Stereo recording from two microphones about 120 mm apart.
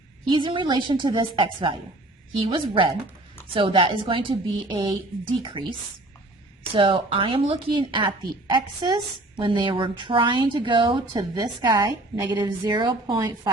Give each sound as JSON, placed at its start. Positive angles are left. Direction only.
{"t": 0.3, "sound": "a woman's voice", "side_deg": -45}
{"t": 6.7, "sound": "a woman's voice", "side_deg": -50}